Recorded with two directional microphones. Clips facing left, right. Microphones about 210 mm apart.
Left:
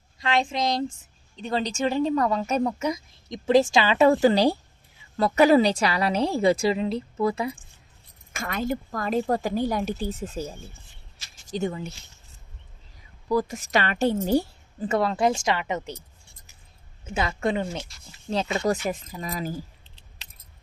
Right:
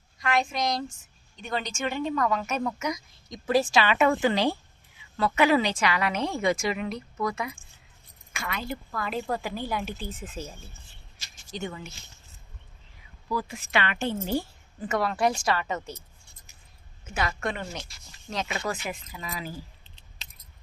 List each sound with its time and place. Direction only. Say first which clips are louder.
0.2 s speech: left 2 dB; 25° left (ahead or behind)
8.3 s a woman's voice: left 6 dB; 45° left (ahead or behind)
11.5 s speech: left 7 dB; 35° left (ahead or behind)
13.2 s speech: left 7 dB; 40° left (ahead or behind); by 16.0 s 15° left (ahead or behind)
17.0 s speech: left 4 dB; 25° left (ahead or behind); by 19.6 s 45° left (ahead or behind)